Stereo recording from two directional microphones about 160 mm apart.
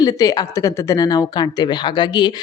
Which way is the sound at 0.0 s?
20° left (ahead or behind).